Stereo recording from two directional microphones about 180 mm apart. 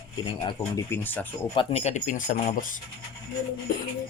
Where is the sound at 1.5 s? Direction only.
35° left (ahead or behind).